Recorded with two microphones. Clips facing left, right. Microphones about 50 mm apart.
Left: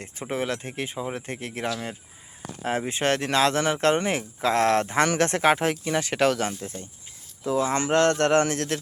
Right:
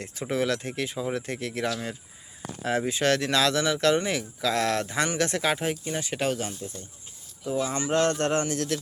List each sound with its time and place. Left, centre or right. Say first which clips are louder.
0.0 s a man's voice: right 2 dB; left
7.9 s speech: left 4 dB; left